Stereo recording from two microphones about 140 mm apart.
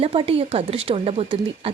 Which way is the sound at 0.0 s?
45° right (ahead or behind).